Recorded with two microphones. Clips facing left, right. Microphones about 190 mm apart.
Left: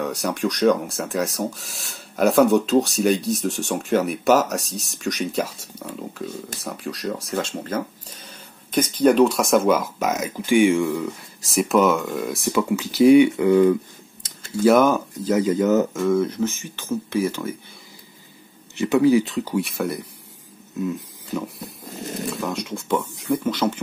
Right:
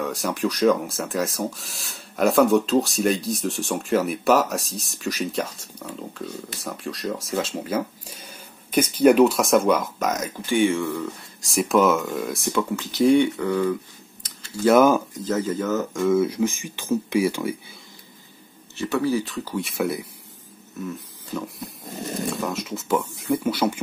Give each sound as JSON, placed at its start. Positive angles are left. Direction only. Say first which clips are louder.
{"t": 0.0, "sound": "speech", "louder": "left 1 dB", "side_deg": 0}
{"t": 11.4, "sound": "speech", "louder": "left 1 dB", "side_deg": 0}
{"t": 14.6, "sound": "speech", "louder": "even", "side_deg": 0}
{"t": 15.2, "sound": "speech", "louder": "left 7 dB", "side_deg": 15}
{"t": 15.9, "sound": "speech", "louder": "even", "side_deg": 0}
{"t": 18.8, "sound": "speech", "louder": "left 6 dB", "side_deg": 15}
{"t": 19.5, "sound": "speech", "louder": "even", "side_deg": 0}
{"t": 21.3, "sound": "speech", "louder": "left 3 dB", "side_deg": 10}
{"t": 22.3, "sound": "speech", "louder": "left 1 dB", "side_deg": 0}